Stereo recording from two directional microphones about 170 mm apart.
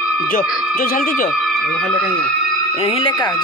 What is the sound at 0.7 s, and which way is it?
Speech, 55° left (ahead or behind).